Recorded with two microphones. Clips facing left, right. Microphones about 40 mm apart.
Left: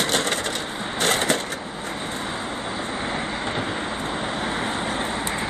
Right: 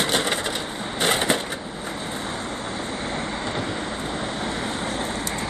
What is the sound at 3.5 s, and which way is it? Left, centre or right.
Vehicle, left.